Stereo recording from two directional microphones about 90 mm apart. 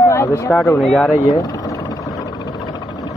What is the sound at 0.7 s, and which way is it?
Speech, 5° left (ahead or behind).